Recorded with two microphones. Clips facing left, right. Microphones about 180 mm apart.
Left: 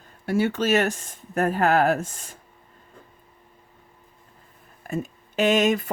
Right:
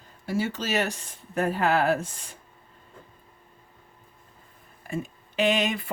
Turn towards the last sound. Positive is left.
turn(degrees=45)  # may be behind; listen again after turning